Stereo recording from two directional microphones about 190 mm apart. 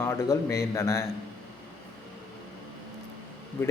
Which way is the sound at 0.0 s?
15° left (ahead or behind).